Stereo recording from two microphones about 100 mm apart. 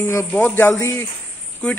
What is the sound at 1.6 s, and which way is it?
Speech, 10° left (ahead or behind).